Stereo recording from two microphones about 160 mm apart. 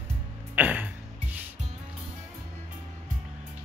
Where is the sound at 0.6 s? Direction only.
10° right (ahead or behind).